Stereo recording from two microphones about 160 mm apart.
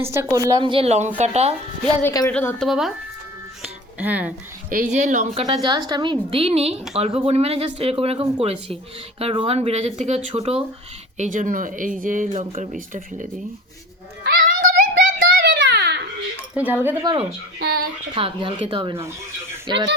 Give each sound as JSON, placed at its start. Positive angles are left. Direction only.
{"t": 0.0, "sound": "a woman's voice", "side_deg": -15}
{"t": 0.6, "sound": "speech", "side_deg": -35}
{"t": 2.0, "sound": "speech", "side_deg": 10}
{"t": 2.6, "sound": "speech", "side_deg": 0}
{"t": 3.6, "sound": "music", "side_deg": -10}
{"t": 4.7, "sound": "speech", "side_deg": -55}
{"t": 5.6, "sound": "speech", "side_deg": -25}
{"t": 11.2, "sound": "speech", "side_deg": -55}
{"t": 14.3, "sound": "child singing", "side_deg": -60}
{"t": 15.7, "sound": "baby cry", "side_deg": -90}
{"t": 16.6, "sound": "a woman's voice", "side_deg": -10}
{"t": 17.0, "sound": "speech", "side_deg": -25}
{"t": 17.6, "sound": "speech", "side_deg": -75}
{"t": 18.1, "sound": "speech", "side_deg": -35}